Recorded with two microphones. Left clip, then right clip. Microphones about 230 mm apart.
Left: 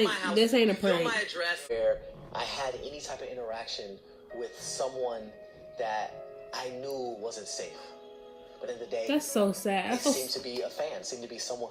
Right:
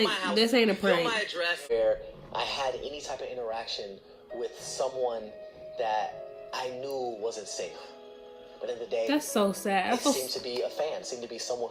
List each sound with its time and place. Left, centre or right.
0.0 s speech: right
0.3 s speech: centre
1.0 s speech: right
8.6 s speech: right
9.0 s speech: centre
10.2 s speech: right